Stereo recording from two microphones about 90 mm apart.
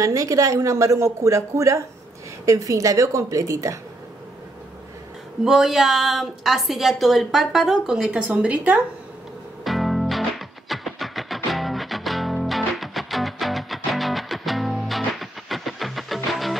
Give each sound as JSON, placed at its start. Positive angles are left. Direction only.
{"t": 0.0, "sound": "a woman's voice", "side_deg": -35}
{"t": 5.4, "sound": "a woman's voice", "side_deg": -5}
{"t": 9.7, "sound": "music", "side_deg": 0}